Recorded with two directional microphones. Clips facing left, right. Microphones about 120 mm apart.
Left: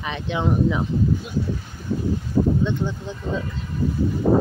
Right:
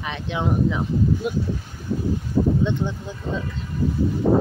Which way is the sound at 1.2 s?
60° right (ahead or behind).